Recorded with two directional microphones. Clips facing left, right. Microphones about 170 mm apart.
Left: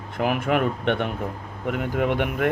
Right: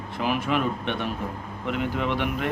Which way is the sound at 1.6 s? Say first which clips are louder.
Left 3 dB; 50° left (ahead or behind).